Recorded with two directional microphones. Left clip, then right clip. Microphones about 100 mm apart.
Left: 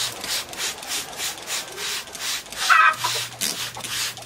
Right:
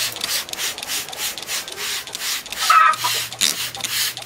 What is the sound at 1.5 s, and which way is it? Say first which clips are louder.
Wood: right 2 dB; centre (ahead or behind).